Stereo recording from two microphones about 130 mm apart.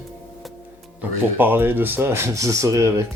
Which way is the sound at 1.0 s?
15° right (ahead or behind).